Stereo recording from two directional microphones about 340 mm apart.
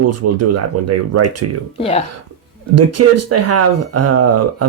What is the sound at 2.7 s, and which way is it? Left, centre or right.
Speech, right.